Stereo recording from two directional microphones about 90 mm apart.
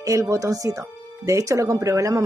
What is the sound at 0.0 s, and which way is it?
Speech, 40° right (ahead or behind).